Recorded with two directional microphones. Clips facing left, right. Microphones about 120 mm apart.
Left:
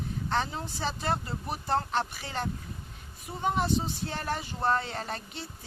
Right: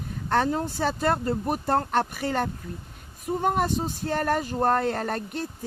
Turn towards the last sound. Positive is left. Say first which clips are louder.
# right 8 dB
turn(degrees=-50)  # may be behind; listen again after turning